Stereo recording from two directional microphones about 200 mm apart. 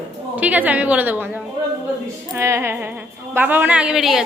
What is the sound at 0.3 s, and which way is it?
A woman's voice, 10° right (ahead or behind).